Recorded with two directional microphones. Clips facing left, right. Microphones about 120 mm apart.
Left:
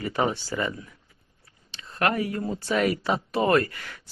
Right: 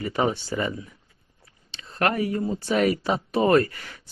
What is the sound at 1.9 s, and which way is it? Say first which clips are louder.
Speech: right 1 dB; 30° right (ahead or behind).